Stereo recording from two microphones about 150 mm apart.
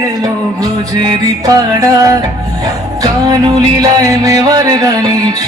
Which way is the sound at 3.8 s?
25° right (ahead or behind).